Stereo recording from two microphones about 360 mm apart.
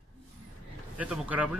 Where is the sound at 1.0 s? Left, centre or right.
Centre.